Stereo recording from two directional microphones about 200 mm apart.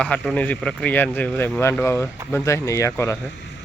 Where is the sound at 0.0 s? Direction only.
5° left (ahead or behind).